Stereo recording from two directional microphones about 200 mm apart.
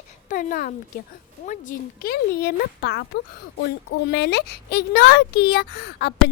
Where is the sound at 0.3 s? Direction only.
40° left (ahead or behind).